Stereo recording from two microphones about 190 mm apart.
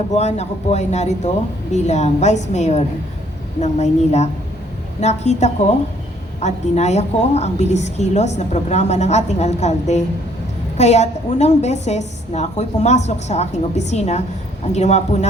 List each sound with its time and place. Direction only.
0.1 s a woman's voice: 35° left (ahead or behind)